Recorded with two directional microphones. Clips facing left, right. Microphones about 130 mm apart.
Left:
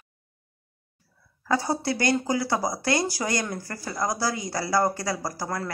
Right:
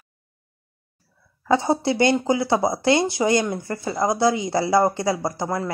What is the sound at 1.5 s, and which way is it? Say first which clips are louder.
A woman's voice: right 6 dB; 25° right (ahead or behind).